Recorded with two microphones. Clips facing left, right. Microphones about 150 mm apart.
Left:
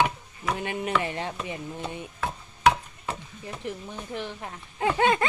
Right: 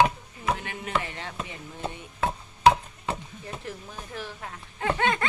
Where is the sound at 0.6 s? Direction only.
20° left (ahead or behind).